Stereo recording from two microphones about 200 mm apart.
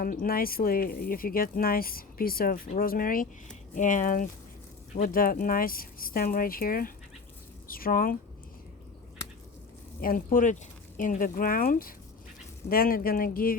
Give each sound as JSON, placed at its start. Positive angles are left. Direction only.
{"t": 0.0, "sound": "speech", "side_deg": 45}
{"t": 10.0, "sound": "speech", "side_deg": 45}